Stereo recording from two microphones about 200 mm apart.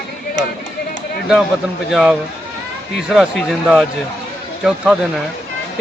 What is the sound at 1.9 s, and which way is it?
A man's voice, centre (ahead or behind).